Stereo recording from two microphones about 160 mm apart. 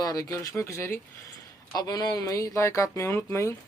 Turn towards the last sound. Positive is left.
turn(degrees=20)  # may be behind; listen again after turning